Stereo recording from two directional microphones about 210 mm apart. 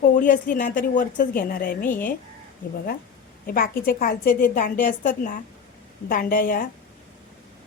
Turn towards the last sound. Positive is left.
turn(degrees=40)  # may be behind; listen again after turning